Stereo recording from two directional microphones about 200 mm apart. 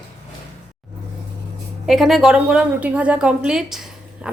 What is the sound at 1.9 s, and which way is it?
A woman's voice, centre (ahead or behind).